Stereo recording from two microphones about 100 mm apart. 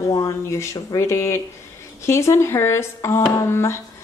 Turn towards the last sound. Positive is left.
turn(degrees=30)  # may be behind; listen again after turning